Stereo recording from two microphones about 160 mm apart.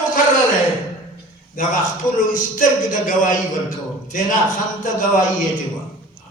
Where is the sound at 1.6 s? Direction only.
60° left (ahead or behind).